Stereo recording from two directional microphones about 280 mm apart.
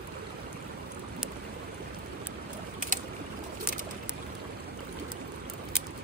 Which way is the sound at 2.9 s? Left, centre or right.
Right.